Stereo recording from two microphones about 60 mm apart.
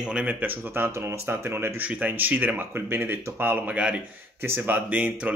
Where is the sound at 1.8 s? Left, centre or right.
Right.